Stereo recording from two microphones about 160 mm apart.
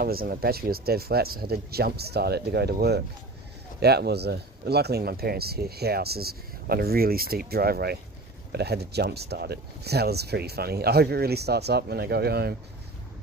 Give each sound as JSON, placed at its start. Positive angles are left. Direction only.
{"t": 0.0, "sound": "speech", "side_deg": -70}
{"t": 8.5, "sound": "speech", "side_deg": -90}